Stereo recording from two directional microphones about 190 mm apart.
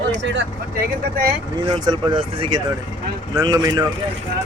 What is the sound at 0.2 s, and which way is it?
Speech, 70° right (ahead or behind).